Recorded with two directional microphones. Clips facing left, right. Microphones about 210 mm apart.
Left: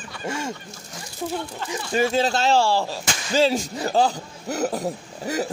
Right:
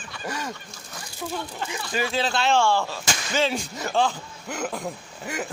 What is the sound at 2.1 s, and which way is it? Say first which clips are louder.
Speech: even; 40° left (ahead or behind).